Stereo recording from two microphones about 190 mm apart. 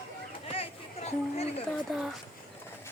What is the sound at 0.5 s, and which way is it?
Chatter, 30° left (ahead or behind).